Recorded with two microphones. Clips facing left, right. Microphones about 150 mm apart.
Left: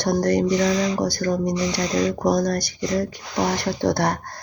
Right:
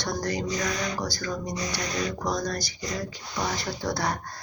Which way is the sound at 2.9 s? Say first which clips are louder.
Left 9 dB; 65° left (ahead or behind).